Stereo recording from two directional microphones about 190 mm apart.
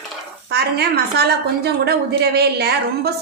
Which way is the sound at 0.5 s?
55° right (ahead or behind).